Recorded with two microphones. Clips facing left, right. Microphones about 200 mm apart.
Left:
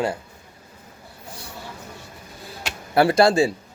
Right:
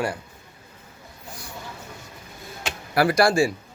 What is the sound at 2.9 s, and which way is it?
Speech, 25° left (ahead or behind).